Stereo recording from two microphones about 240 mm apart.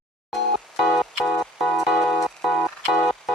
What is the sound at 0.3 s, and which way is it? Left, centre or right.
Music, centre.